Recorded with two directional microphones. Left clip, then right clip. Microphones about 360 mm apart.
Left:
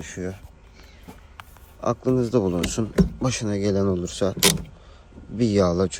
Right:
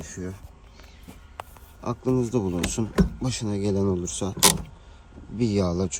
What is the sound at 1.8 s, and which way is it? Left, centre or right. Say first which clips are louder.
Speech: left 7 dB; centre.